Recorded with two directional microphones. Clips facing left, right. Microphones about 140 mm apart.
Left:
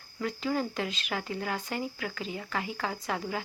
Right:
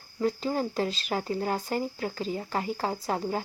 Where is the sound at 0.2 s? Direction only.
35° right (ahead or behind).